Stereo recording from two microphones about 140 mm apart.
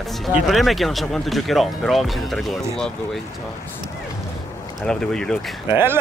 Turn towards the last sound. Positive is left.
turn(degrees=-15)  # may be behind; listen again after turning